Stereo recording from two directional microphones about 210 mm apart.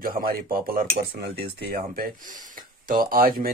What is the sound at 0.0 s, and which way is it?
Speech, 45° right (ahead or behind).